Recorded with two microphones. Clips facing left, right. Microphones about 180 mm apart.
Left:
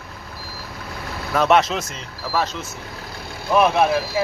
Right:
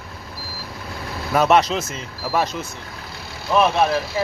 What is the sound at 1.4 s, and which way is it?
Speech, centre (ahead or behind).